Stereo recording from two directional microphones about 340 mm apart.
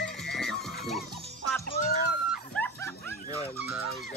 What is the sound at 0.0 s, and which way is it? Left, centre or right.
Music, centre.